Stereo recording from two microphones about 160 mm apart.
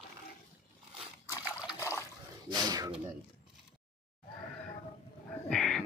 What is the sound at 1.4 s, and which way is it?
Liquid, 5° right (ahead or behind).